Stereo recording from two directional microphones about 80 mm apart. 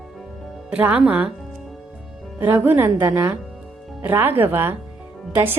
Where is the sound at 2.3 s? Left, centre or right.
Right.